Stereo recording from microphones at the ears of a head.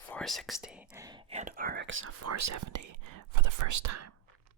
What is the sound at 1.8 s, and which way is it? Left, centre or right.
Speech, right.